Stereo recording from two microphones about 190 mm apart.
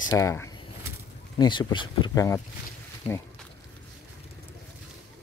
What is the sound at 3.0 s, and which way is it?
Speech, 30° left (ahead or behind).